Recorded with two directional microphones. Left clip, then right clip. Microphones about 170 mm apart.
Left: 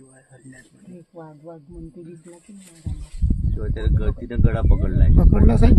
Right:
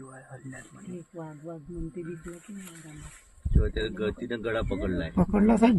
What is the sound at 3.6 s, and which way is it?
Speech, 65° left (ahead or behind).